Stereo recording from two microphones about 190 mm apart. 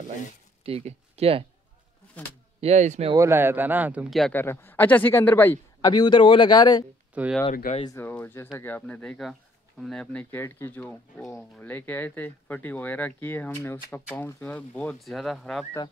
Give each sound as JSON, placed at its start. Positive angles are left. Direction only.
{"t": 0.7, "sound": "speech", "side_deg": -30}
{"t": 2.6, "sound": "speech", "side_deg": -35}
{"t": 3.1, "sound": "speech", "side_deg": -15}
{"t": 4.4, "sound": "speech", "side_deg": 10}
{"t": 5.9, "sound": "a man's voice", "side_deg": 20}
{"t": 7.2, "sound": "speech", "side_deg": -10}
{"t": 7.5, "sound": "speech", "side_deg": 45}
{"t": 7.8, "sound": "speech", "side_deg": 15}